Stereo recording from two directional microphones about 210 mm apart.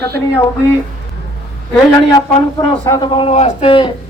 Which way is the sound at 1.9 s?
20° left (ahead or behind).